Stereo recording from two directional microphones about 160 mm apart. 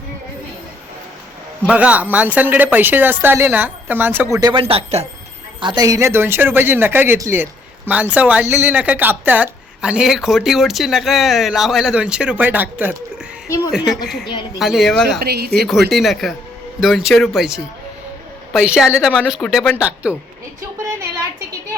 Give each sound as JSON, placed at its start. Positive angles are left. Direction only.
{"t": 1.6, "sound": "speech", "side_deg": -10}
{"t": 4.4, "sound": "speech", "side_deg": -25}
{"t": 4.6, "sound": "speech", "side_deg": -35}
{"t": 5.5, "sound": "speech", "side_deg": -30}
{"t": 15.2, "sound": "speech", "side_deg": -80}
{"t": 15.6, "sound": "speech", "side_deg": 0}